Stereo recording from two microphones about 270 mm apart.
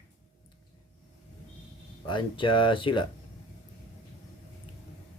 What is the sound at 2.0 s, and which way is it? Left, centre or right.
Speech, centre.